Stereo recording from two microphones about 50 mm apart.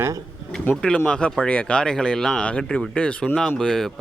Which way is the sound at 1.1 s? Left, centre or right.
Centre.